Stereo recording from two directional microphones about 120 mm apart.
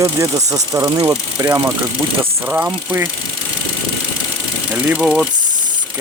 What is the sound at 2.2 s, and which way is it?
Speech, 15° right (ahead or behind).